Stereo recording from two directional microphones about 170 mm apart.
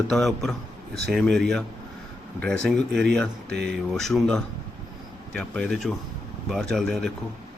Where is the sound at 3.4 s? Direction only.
75° right (ahead or behind).